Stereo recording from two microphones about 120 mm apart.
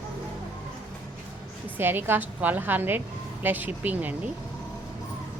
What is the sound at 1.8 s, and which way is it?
Speech, 20° right (ahead or behind).